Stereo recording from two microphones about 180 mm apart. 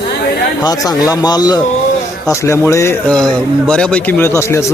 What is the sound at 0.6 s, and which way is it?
Speech, 20° left (ahead or behind).